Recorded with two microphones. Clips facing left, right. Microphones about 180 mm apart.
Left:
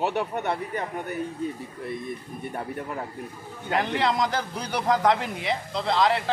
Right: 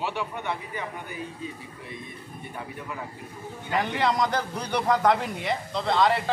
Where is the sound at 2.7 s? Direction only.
50° left (ahead or behind).